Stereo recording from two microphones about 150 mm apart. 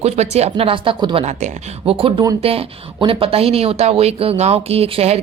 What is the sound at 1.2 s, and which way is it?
Speech, 45° right (ahead or behind).